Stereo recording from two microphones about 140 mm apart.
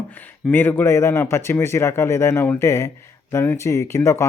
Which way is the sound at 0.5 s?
15° left (ahead or behind).